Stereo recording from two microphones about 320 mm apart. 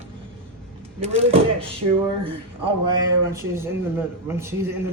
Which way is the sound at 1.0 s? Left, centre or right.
Centre.